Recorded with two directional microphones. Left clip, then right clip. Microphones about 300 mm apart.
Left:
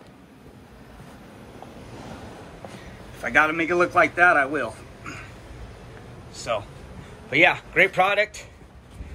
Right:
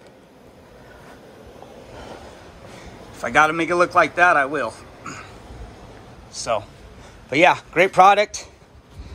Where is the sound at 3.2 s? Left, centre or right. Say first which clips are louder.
Right 3 dB; centre.